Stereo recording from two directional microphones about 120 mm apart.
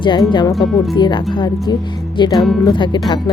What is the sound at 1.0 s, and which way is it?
Speech, 40° left (ahead or behind).